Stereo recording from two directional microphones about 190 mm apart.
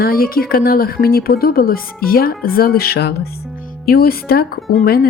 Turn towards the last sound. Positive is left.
turn(degrees=55)  # may be behind; listen again after turning